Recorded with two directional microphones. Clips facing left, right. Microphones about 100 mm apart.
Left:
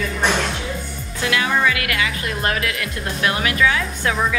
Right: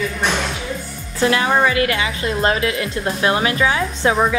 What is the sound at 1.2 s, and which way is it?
Speech, 35° right (ahead or behind).